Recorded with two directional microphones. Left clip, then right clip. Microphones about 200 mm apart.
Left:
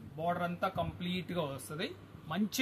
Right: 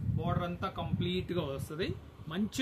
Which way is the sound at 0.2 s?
15° left (ahead or behind).